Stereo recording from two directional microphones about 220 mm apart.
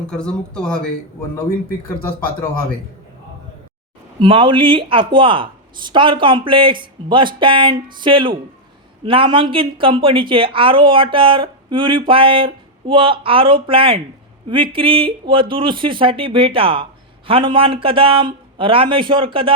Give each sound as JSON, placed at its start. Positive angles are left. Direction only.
{"t": 0.1, "sound": "speech", "side_deg": 5}
{"t": 4.2, "sound": "a woman's voice", "side_deg": -25}